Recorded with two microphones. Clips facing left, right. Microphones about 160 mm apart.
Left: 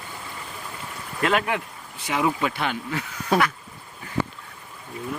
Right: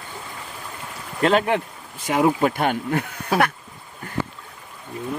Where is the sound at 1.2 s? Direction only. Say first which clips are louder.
Right 5 dB; 30° right (ahead or behind).